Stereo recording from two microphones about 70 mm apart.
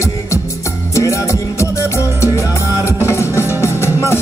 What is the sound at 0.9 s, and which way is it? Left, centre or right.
Music, left.